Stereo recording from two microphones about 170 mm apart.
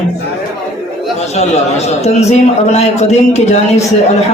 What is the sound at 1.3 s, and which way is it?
A man's voice, 40° left (ahead or behind).